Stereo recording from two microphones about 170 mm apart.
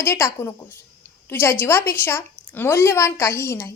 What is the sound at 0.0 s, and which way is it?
A woman's voice, 15° left (ahead or behind).